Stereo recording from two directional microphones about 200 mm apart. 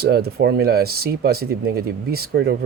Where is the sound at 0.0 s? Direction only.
50° right (ahead or behind).